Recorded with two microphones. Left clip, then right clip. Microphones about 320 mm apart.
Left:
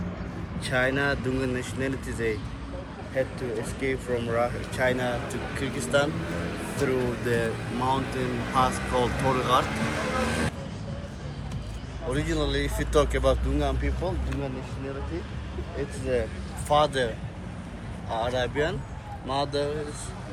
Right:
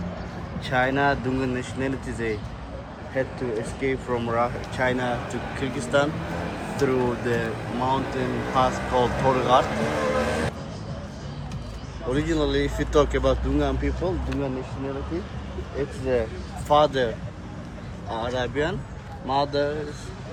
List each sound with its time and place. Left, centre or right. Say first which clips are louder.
0.6 s speech: right 3 dB; centre
12.1 s speech: right 4 dB; centre
16.1 s speech: right 3 dB; right
18.1 s speech: even; centre